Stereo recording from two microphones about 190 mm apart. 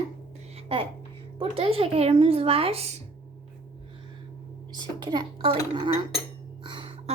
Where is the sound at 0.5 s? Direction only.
30° right (ahead or behind).